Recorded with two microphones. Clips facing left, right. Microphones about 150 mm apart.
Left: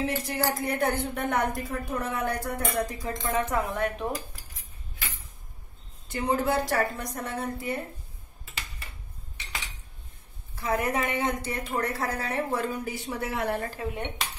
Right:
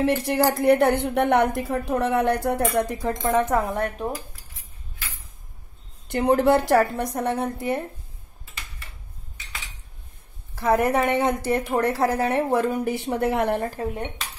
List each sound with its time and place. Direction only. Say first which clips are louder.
0.0 s a woman's voice: right 8 dB; 65° right (ahead or behind)
2.9 s speech: right 7 dB; 55° right (ahead or behind)
4.0 s cutlery: right 2 dB; 20° right (ahead or behind)
6.0 s a woman's voice: right 8 dB; 65° right (ahead or behind)
10.6 s a woman's voice: right 7 dB; 55° right (ahead or behind)
11.8 s a woman's voice: right 9 dB; 70° right (ahead or behind)
13.6 s speech: right 5 dB; 45° right (ahead or behind)